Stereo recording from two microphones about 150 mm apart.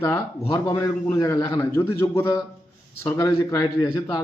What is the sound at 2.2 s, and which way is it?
Speech, 25° left (ahead or behind).